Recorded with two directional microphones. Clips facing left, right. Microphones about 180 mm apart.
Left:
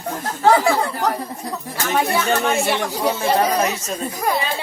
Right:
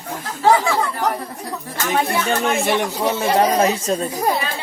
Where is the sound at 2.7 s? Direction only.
20° right (ahead or behind).